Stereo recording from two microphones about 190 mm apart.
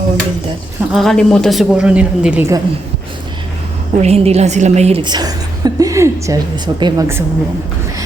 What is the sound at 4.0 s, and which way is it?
A woman's voice, 35° right (ahead or behind).